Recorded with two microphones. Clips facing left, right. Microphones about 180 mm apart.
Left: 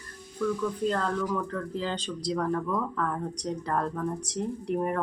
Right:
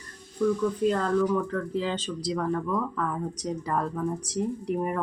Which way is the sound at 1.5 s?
Centre (ahead or behind).